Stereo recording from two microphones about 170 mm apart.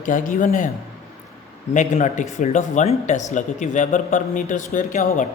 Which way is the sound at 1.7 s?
45° left (ahead or behind).